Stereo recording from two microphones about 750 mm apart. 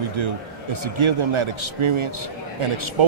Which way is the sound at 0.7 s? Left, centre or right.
Right.